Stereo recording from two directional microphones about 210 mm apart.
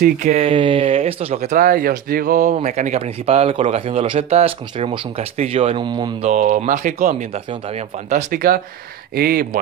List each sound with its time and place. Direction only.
0.0 s speech: 35° right (ahead or behind)
6.3 s speech: 35° right (ahead or behind)